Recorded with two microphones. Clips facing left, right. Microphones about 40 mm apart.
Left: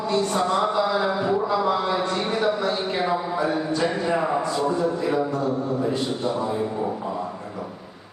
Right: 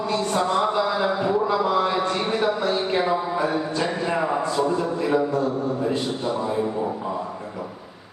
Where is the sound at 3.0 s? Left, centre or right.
Centre.